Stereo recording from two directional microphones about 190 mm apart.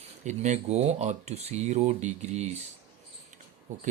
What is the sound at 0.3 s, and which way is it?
Speech, 40° right (ahead or behind).